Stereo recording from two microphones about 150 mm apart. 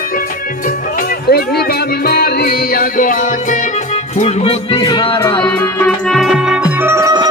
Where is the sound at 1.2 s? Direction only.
90° left; by 3.6 s 60° left (ahead or behind).